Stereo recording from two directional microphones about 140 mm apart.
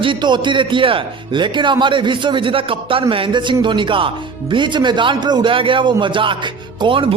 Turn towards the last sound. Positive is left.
turn(degrees=-35)  # may be behind; listen again after turning